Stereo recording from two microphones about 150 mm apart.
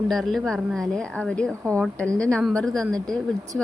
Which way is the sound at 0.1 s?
Centre (ahead or behind).